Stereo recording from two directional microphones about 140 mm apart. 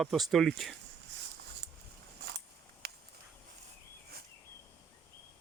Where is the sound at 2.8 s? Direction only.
90° right.